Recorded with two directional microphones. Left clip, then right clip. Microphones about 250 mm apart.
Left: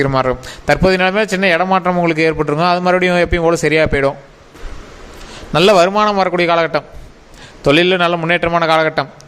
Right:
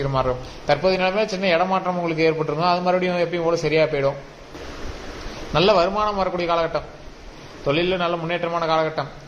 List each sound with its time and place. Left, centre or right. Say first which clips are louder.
0.0 s a man's voice: left 7 dB; left
5.5 s a man's voice: left 7 dB; left